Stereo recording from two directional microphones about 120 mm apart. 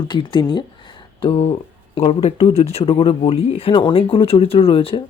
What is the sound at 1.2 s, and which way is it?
Speech, 55° left (ahead or behind).